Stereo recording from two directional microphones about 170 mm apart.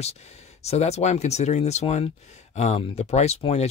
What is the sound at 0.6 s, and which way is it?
Speech, 40° left (ahead or behind).